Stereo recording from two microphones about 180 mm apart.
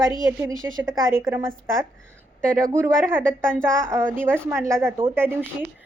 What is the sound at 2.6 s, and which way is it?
A woman's voice, 15° right (ahead or behind).